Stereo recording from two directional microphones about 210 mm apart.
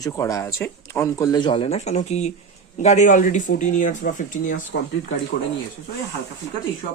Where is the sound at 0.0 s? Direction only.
15° left (ahead or behind); by 4.6 s 40° left (ahead or behind).